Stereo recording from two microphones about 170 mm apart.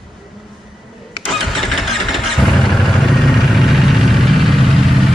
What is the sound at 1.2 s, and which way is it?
Vehicle, centre (ahead or behind).